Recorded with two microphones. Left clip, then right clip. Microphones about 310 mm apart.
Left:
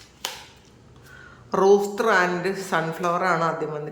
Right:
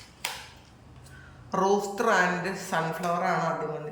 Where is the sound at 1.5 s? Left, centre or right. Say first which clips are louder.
Left 7 dB; centre.